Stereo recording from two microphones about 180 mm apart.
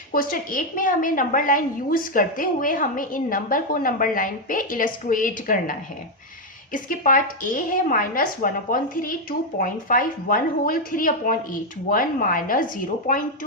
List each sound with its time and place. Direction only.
0.1 s a woman's voice: 50° left (ahead or behind)
6.7 s a woman's voice: 50° left (ahead or behind)